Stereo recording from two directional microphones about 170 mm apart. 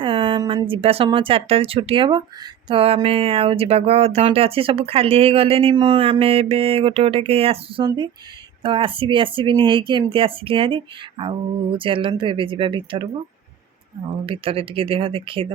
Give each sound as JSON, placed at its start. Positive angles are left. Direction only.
{"t": 0.0, "sound": "a sound", "side_deg": -30}
{"t": 0.7, "sound": "speech", "side_deg": -35}
{"t": 14.3, "sound": "speech", "side_deg": -30}